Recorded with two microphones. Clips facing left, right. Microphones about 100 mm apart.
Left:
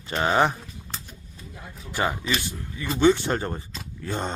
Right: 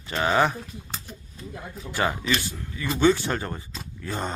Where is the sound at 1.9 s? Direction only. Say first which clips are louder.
Right 1 dB; 20° left (ahead or behind).